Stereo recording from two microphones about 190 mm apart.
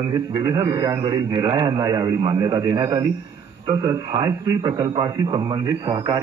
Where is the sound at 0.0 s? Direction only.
20° right (ahead or behind).